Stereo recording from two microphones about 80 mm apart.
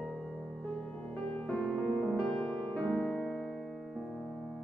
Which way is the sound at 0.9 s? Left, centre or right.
Left.